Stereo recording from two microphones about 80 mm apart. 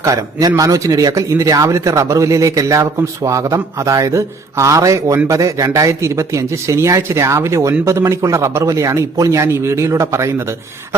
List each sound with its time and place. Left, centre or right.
0.0 s speech: right